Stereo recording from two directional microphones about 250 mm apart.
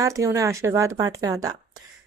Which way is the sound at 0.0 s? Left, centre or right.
Centre.